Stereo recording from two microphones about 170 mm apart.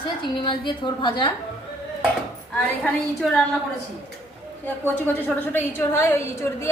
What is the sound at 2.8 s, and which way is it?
Speech, 5° left (ahead or behind).